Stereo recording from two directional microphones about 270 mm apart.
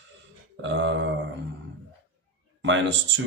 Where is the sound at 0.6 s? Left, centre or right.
Right.